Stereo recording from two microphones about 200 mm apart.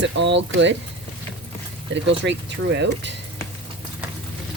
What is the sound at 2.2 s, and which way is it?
Speech, 60° right (ahead or behind).